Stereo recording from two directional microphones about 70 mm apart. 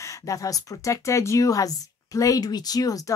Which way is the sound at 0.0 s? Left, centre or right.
Left.